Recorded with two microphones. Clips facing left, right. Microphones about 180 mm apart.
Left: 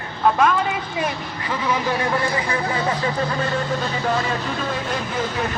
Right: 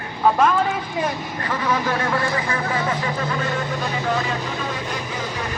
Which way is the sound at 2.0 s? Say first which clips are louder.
Left 1 dB; 20° left (ahead or behind).